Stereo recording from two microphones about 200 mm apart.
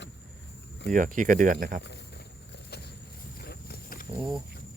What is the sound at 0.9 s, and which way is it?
Speech, 40° right (ahead or behind).